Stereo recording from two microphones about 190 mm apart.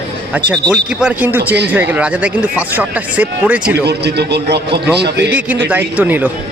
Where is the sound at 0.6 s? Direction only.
Centre (ahead or behind).